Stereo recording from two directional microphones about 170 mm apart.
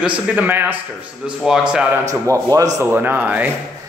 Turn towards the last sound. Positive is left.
turn(degrees=-10)  # may be behind; listen again after turning